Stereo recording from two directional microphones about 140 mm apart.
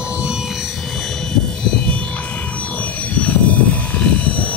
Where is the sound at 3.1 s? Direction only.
10° left (ahead or behind).